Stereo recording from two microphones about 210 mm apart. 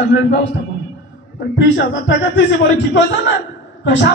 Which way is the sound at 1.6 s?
60° left (ahead or behind).